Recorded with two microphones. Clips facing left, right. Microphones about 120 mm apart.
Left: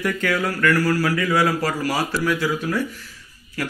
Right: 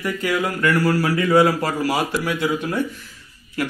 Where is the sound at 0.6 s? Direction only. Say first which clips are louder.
Even; 25° right (ahead or behind).